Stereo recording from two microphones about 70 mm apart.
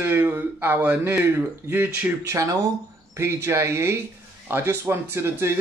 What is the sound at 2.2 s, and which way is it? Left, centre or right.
A man's voice, right.